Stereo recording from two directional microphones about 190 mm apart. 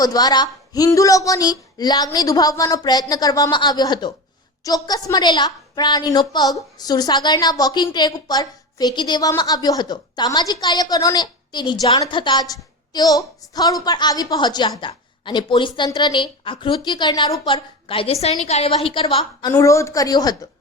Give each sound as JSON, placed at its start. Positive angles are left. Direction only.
{"t": 0.0, "sound": "a woman's voice", "side_deg": 20}